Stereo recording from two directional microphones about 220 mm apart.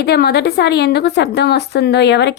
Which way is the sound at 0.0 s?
45° left (ahead or behind).